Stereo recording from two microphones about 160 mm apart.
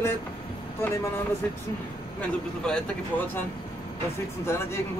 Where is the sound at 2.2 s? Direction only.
5° left (ahead or behind).